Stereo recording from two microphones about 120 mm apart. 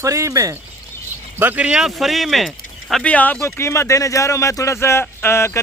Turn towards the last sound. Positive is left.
turn(degrees=20)  # may be behind; listen again after turning